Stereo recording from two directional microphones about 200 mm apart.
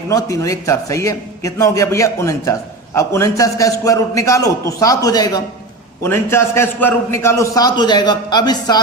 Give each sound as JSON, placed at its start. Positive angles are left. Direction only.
{"t": 0.1, "sound": "a man's voice", "side_deg": 15}